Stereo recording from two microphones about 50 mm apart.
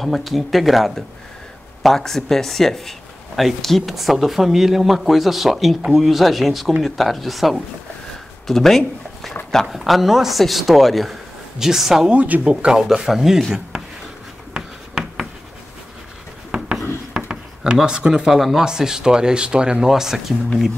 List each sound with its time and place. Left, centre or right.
0.0 s speech: centre
12.1 s speech: right
12.4 s speech: centre
12.8 s speech: centre
14.5 s writing: centre
17.1 s speech: centre
19.9 s speech: centre